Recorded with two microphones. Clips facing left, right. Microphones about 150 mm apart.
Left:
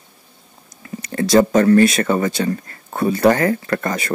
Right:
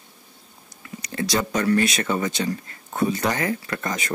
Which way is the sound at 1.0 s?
50° left (ahead or behind).